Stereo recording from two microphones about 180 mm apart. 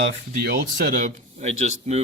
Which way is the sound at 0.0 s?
75° right (ahead or behind).